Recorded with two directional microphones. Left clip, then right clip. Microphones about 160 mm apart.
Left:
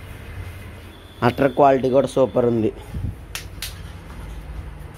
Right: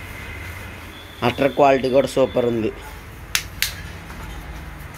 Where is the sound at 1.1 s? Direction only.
25° left (ahead or behind).